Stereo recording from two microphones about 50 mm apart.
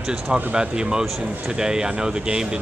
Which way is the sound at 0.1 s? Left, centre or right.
Centre.